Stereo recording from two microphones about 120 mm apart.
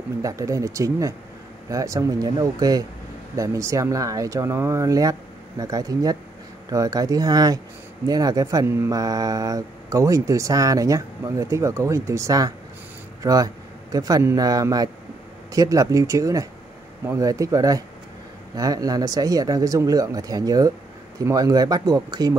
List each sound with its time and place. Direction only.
0.2 s speech: 30° right (ahead or behind)